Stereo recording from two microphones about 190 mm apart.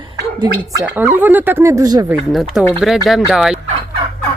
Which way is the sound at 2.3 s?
Centre (ahead or behind).